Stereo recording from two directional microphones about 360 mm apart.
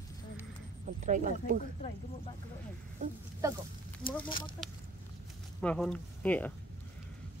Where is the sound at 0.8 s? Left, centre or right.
Right.